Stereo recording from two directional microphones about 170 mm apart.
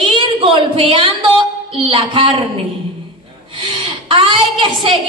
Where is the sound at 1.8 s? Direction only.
30° right (ahead or behind).